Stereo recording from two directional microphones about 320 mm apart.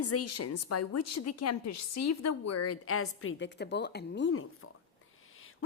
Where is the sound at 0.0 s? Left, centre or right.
Left.